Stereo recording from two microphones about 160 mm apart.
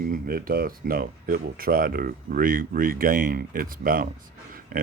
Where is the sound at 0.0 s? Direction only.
65° right (ahead or behind).